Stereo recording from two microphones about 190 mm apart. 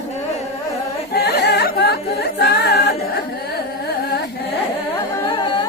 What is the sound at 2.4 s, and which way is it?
A capella, 60° left (ahead or behind).